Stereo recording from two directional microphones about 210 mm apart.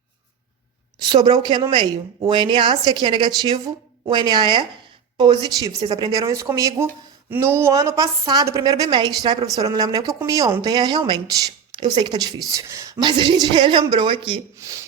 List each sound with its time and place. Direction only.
1.1 s a woman's voice: 20° right (ahead or behind)